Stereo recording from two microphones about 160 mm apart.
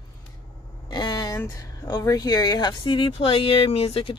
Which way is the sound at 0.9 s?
25° left (ahead or behind).